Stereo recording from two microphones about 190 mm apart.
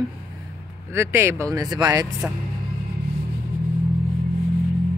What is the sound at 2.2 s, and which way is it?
Speech, 10° right (ahead or behind).